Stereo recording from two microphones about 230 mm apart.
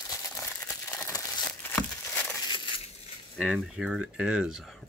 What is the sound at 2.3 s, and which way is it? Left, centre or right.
Crushing, centre.